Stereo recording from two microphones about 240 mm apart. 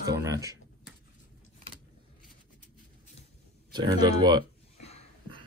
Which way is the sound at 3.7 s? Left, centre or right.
Centre.